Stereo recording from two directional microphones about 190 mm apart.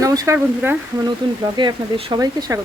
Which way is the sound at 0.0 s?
20° right (ahead or behind).